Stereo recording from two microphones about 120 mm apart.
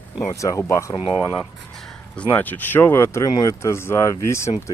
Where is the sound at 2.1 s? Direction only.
10° left (ahead or behind).